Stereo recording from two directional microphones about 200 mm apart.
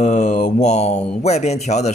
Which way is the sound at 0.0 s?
35° left (ahead or behind).